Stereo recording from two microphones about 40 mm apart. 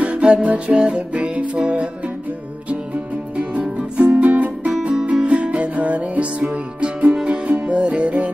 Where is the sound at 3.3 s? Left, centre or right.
Right.